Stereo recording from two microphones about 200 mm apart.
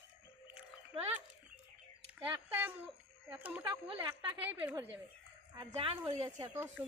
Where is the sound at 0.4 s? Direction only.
10° right (ahead or behind).